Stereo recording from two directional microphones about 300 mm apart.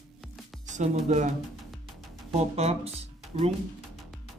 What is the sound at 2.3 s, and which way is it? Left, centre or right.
Speech, right.